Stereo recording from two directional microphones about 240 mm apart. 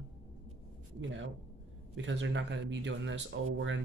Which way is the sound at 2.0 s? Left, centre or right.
Right.